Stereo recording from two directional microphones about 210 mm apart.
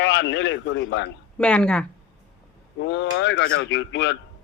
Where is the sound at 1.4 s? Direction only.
5° left (ahead or behind).